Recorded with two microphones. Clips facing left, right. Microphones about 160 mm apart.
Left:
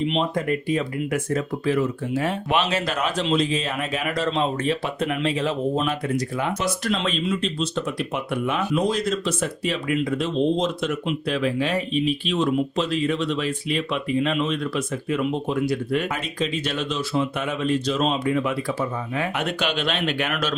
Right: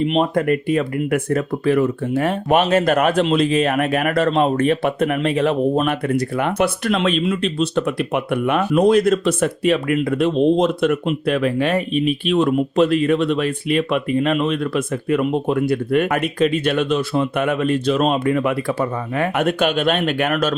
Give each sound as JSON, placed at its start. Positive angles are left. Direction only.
{"t": 0.1, "sound": "speech", "side_deg": -55}